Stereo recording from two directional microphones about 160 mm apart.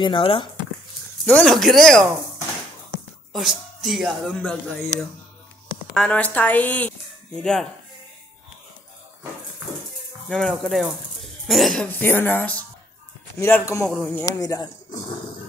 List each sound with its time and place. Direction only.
0.0 s speech: 35° left (ahead or behind)
1.2 s speech: 5° left (ahead or behind)
3.3 s speech: centre (ahead or behind)
5.9 s a woman's voice: 10° left (ahead or behind)
10.2 s a woman's voice: centre (ahead or behind); by 13.8 s 15° left (ahead or behind)
13.8 s speech: 5° left (ahead or behind)
14.2 s speech: 20° left (ahead or behind)